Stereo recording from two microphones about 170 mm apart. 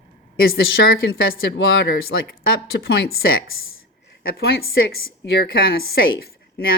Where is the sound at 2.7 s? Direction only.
70° left (ahead or behind).